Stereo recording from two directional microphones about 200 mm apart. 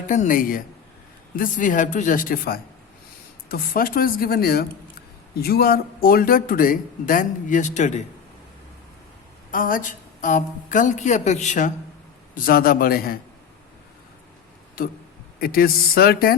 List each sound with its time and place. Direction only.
0.1 s a woman's voice: 40° left (ahead or behind)
9.5 s a woman's voice: 45° left (ahead or behind)
14.8 s speech: 45° left (ahead or behind)